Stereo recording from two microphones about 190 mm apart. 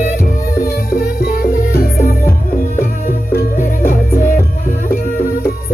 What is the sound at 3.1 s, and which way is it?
Music, 45° left (ahead or behind).